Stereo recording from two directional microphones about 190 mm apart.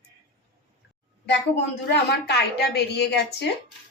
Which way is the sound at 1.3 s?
65° left (ahead or behind).